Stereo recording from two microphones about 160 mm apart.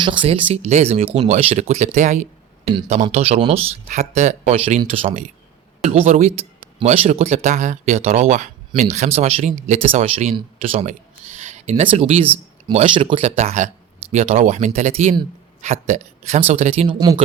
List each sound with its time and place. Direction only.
0.0 s speech: 30° right (ahead or behind)